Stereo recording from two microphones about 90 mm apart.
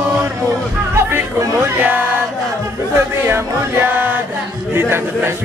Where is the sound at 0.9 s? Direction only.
30° right (ahead or behind).